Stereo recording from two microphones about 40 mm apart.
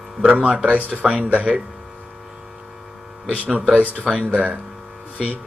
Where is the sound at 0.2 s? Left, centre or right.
Right.